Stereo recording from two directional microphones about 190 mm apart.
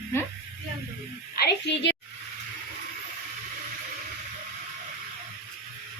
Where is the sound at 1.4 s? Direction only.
65° left (ahead or behind).